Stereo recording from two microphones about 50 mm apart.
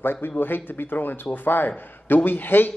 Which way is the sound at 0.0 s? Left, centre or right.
Left.